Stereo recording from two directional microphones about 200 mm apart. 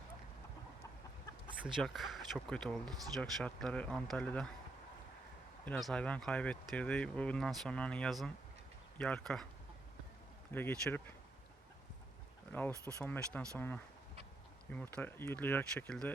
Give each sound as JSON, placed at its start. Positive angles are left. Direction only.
{"t": 1.5, "sound": "speech", "side_deg": -5}
{"t": 5.6, "sound": "speech", "side_deg": 5}
{"t": 10.5, "sound": "speech", "side_deg": 10}
{"t": 12.5, "sound": "speech", "side_deg": 10}
{"t": 14.7, "sound": "speech", "side_deg": 10}